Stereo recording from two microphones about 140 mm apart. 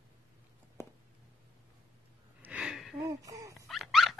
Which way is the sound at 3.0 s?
25° right (ahead or behind).